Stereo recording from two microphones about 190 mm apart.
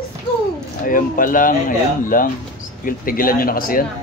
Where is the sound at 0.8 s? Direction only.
45° left (ahead or behind).